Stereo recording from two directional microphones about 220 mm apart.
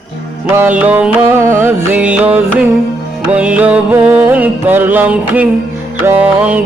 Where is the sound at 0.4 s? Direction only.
10° right (ahead or behind).